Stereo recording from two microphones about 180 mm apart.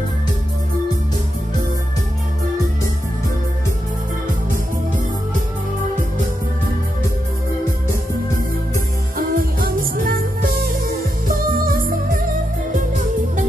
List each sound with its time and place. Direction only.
9.1 s music: 55° right (ahead or behind)